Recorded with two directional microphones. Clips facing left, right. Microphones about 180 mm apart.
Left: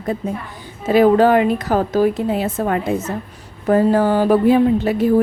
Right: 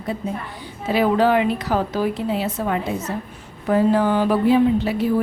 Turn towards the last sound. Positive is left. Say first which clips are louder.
# left 3 dB
turn(degrees=45)  # may be behind; listen again after turning